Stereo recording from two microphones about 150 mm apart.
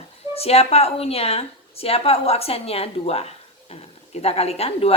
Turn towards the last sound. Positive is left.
turn(degrees=40)  # may be behind; listen again after turning